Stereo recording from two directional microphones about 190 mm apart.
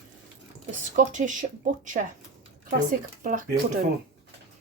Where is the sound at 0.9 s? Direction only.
40° right (ahead or behind).